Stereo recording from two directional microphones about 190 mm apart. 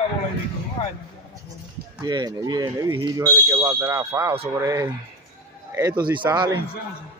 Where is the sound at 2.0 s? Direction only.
20° right (ahead or behind).